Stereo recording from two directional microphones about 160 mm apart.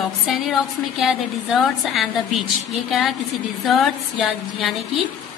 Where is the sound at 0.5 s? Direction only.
Centre (ahead or behind).